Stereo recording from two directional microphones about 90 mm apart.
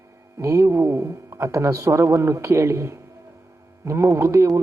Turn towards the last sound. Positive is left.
turn(degrees=-35)  # may be behind; listen again after turning